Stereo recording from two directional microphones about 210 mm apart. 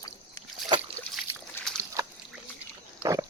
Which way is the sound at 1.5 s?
5° left (ahead or behind).